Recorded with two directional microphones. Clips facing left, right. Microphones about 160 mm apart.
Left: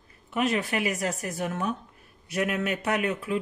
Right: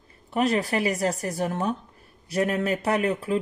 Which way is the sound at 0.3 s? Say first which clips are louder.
Right 3 dB; 35° right (ahead or behind).